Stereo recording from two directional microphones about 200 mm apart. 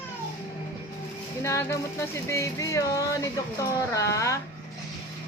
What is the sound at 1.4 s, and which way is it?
Speech, 15° left (ahead or behind).